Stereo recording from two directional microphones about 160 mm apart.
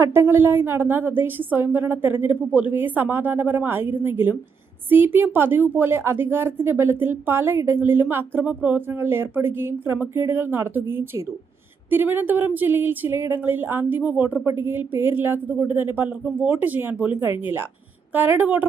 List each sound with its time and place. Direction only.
0.0 s a woman's voice: 15° right (ahead or behind)